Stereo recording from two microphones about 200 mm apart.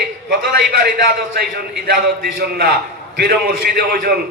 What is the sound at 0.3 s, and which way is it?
A man's voice, 50° right (ahead or behind).